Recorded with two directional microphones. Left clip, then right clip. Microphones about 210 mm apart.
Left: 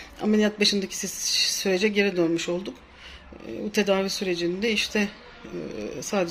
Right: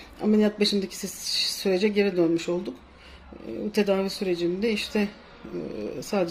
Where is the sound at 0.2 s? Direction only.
5° right (ahead or behind).